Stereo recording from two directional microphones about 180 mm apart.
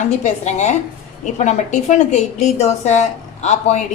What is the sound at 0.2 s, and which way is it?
A woman's voice, 40° left (ahead or behind).